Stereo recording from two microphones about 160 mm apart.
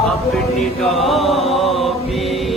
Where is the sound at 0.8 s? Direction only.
Centre (ahead or behind).